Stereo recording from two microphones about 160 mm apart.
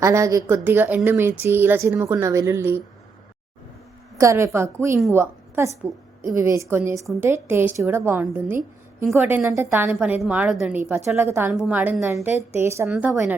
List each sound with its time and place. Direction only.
0.0 s a woman's voice: 20° right (ahead or behind)
4.2 s a woman's voice: 20° right (ahead or behind)